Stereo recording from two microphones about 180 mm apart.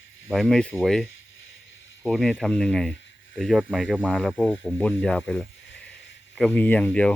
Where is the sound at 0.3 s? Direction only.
5° left (ahead or behind).